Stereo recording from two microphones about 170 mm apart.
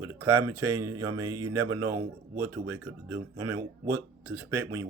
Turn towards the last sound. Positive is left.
turn(degrees=-15)  # may be behind; listen again after turning